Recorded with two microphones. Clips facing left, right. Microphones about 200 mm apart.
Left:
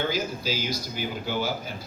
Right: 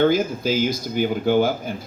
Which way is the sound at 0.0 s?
55° right (ahead or behind).